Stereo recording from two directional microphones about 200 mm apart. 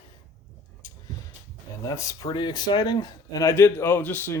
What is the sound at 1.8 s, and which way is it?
Speech, 15° left (ahead or behind).